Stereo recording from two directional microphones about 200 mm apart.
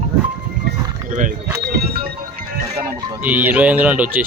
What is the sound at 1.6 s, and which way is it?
Music, 50° right (ahead or behind).